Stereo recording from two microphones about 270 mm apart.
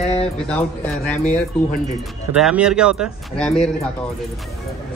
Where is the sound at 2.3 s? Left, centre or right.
Centre.